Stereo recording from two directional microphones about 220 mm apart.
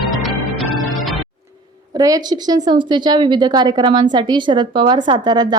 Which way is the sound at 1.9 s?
15° right (ahead or behind).